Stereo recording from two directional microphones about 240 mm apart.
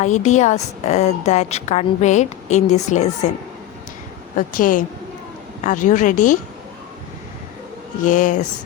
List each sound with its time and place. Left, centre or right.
0.0 s a woman's voice: left
4.4 s speech: left
8.0 s speech: left